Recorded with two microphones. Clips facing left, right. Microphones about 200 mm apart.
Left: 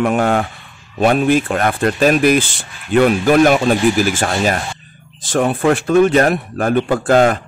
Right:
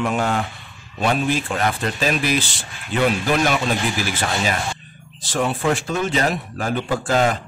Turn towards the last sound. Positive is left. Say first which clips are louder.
# left 7 dB
turn(degrees=55)  # may be behind; listen again after turning